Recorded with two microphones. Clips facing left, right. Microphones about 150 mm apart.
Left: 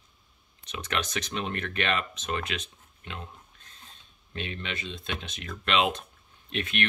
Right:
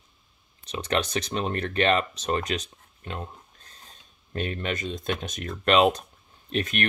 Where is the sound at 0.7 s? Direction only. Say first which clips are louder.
Right 6 dB; 35° right (ahead or behind).